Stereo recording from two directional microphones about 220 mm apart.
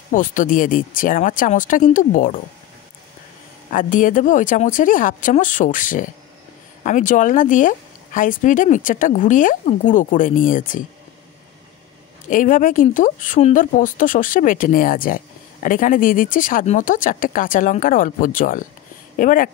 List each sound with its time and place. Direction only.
0.1 s speech: 35° left (ahead or behind)
3.7 s speech: 35° left (ahead or behind)
12.3 s speech: 35° left (ahead or behind)